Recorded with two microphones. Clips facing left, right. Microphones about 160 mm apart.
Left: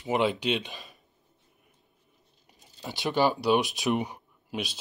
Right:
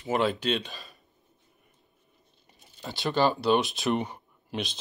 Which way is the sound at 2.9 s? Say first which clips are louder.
Even; 15° left (ahead or behind).